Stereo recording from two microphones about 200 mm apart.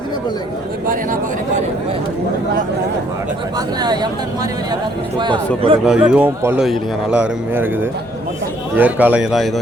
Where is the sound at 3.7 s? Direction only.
20° right (ahead or behind).